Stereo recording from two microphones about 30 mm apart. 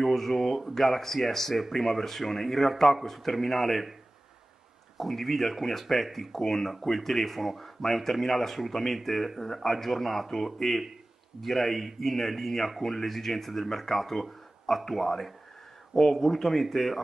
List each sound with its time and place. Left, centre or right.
0.0 s speech: centre
5.0 s speech: centre